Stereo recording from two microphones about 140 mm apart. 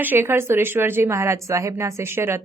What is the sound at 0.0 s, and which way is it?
A woman's voice, 15° right (ahead or behind).